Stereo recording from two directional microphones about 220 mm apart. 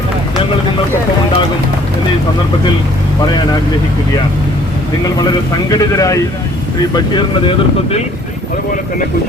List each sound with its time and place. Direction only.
5.6 s speech: 15° left (ahead or behind)